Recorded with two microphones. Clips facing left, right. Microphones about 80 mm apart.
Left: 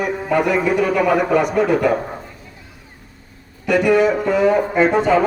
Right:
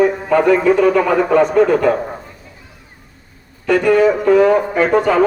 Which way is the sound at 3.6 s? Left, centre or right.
Centre.